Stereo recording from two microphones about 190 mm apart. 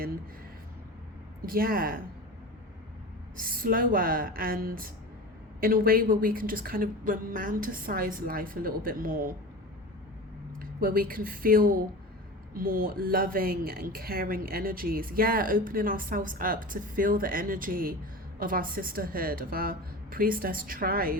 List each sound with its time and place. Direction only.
1.5 s a woman's voice: 50° right (ahead or behind)
3.3 s a woman's voice: 50° right (ahead or behind)
10.6 s a woman's voice: 50° right (ahead or behind)